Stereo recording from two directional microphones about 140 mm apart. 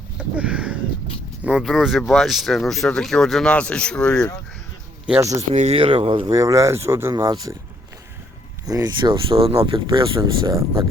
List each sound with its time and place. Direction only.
0.2 s speech: 10° right (ahead or behind); by 4.3 s 5° left (ahead or behind)
5.4 s speech: 50° right (ahead or behind)
6.3 s speech: 25° right (ahead or behind)
8.6 s speech: 25° right (ahead or behind)